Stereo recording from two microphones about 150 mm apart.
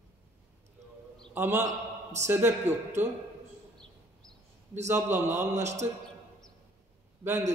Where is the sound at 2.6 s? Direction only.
50° right (ahead or behind).